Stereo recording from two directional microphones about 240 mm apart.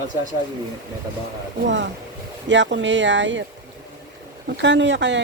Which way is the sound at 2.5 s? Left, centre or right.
Right.